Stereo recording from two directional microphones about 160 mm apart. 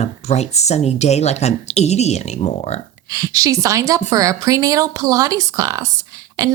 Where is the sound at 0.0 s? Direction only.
45° left (ahead or behind).